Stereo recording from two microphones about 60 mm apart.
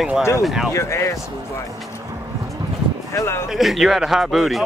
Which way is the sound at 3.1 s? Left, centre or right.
Left.